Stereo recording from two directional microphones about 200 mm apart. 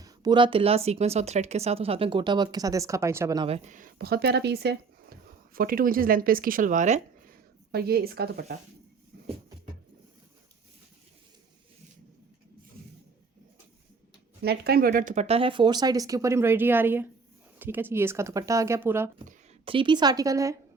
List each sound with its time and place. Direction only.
0.0 s speech: 20° right (ahead or behind); by 7.0 s 35° right (ahead or behind)
7.7 s speech: 50° right (ahead or behind)
14.4 s speech: 50° right (ahead or behind); by 19.1 s 10° right (ahead or behind)
19.6 s speech: 25° right (ahead or behind)